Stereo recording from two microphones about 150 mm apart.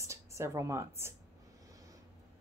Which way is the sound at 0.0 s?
20° right (ahead or behind).